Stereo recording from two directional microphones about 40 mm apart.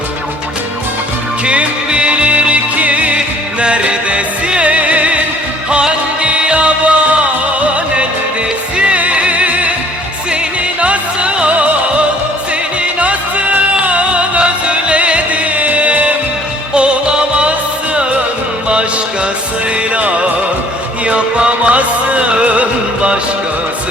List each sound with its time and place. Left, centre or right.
1.5 s music: right
10.8 s music: right
16.7 s music: right
18.7 s music: right